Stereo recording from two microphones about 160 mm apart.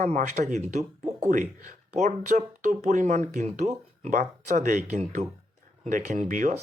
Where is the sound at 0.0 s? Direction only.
50° right (ahead or behind).